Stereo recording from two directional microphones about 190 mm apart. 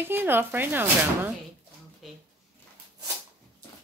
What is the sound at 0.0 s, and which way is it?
Speech, 10° right (ahead or behind).